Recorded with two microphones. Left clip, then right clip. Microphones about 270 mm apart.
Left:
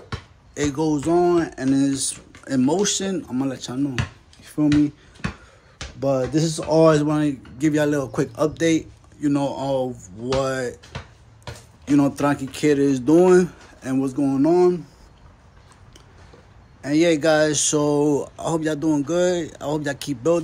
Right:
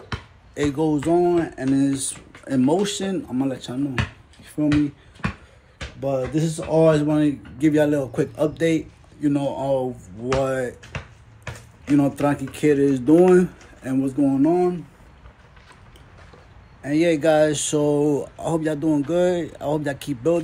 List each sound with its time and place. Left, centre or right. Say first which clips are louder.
0.6 s speech: right 1 dB; centre
4.4 s a sound: left 2 dB; centre
5.9 s speech: left 3 dB; centre
11.9 s speech: left 1 dB; centre
16.8 s speech: left 1 dB; centre